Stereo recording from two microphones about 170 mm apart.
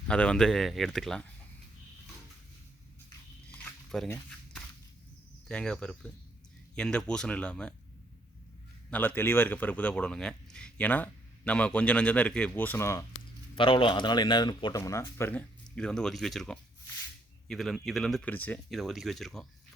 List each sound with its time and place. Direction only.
0.1 s speech: 5° left (ahead or behind)
3.5 s a sound: 10° left (ahead or behind)
5.5 s speech: 5° left (ahead or behind)
8.9 s speech: 10° left (ahead or behind)
13.6 s speech: 30° left (ahead or behind); by 19.5 s centre (ahead or behind)